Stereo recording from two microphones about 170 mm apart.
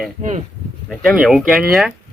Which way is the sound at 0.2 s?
45° right (ahead or behind).